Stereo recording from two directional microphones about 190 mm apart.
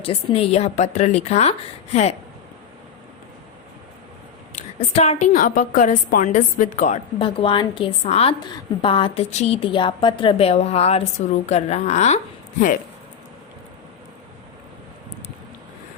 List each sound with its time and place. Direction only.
0.0 s a woman's voice: 30° left (ahead or behind)
4.5 s a woman's voice: 35° left (ahead or behind)
7.2 s a woman's voice: 25° left (ahead or behind)